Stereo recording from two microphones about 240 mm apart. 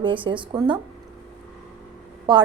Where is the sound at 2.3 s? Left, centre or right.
Centre.